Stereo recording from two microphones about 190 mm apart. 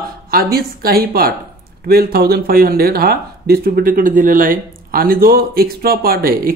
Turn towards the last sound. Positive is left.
turn(degrees=-50)  # may be behind; listen again after turning